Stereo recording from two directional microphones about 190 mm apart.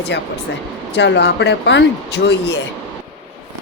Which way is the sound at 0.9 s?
65° left (ahead or behind).